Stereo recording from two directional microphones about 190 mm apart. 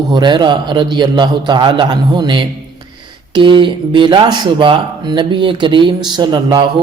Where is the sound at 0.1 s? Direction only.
25° right (ahead or behind).